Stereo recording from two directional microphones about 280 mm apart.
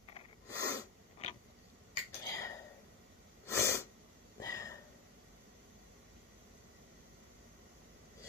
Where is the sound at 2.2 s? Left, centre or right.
Centre.